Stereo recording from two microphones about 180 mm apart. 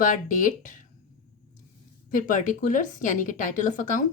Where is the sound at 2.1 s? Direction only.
45° left (ahead or behind).